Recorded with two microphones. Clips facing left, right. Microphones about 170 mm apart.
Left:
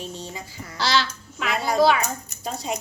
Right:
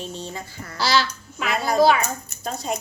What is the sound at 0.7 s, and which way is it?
Speech, 5° right (ahead or behind).